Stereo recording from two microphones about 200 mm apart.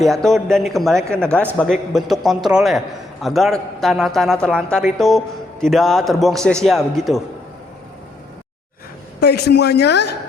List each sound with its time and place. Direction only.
0.0 s a man's voice: centre (ahead or behind)
9.2 s a man's voice: 55° left (ahead or behind)